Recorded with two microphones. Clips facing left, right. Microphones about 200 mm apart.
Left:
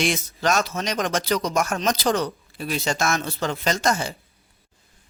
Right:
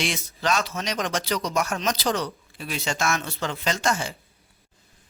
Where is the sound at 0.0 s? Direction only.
45° left (ahead or behind).